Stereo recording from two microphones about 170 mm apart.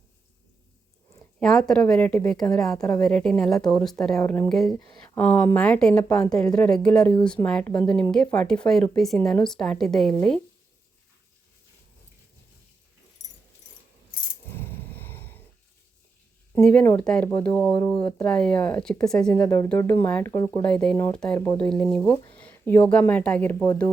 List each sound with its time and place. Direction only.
1.4 s a woman's voice: 5° left (ahead or behind)
2.7 s a woman's voice: 20° left (ahead or behind)
3.0 s a woman's voice: 5° left (ahead or behind)
4.4 s a woman's voice: centre (ahead or behind)
13.2 s dog: 40° left (ahead or behind)
14.4 s a sound: 15° left (ahead or behind)
16.6 s a woman's voice: 10° left (ahead or behind)